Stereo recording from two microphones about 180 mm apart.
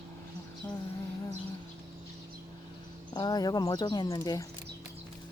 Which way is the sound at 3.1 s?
20° left (ahead or behind).